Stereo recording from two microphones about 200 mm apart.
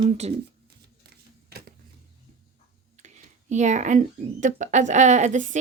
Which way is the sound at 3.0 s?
35° right (ahead or behind).